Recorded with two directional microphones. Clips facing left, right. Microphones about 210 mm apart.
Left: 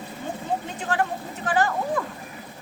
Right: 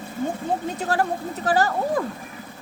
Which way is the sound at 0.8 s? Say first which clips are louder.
Right 3 dB; 40° right (ahead or behind).